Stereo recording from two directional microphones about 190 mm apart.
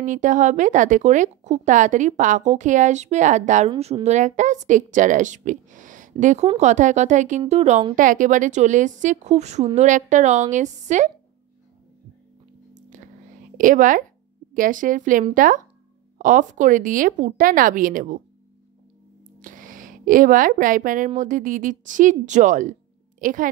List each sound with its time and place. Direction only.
0.0 s speech: 40° right (ahead or behind)
12.7 s whispering: 40° right (ahead or behind)
13.6 s speech: 45° right (ahead or behind)
19.4 s a woman's voice: 45° right (ahead or behind)